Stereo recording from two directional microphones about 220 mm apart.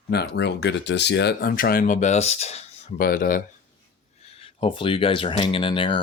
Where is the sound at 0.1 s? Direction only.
50° left (ahead or behind).